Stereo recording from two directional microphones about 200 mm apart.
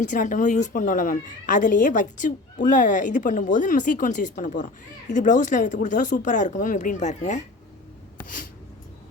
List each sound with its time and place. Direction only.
0.0 s speech: 40° left (ahead or behind)